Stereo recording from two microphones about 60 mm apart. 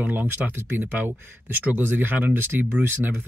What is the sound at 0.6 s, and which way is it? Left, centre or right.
Speech, right.